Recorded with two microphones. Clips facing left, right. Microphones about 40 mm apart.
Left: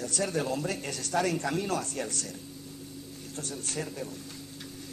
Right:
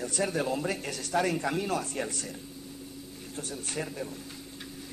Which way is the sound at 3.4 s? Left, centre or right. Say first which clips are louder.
Right 1 dB; centre.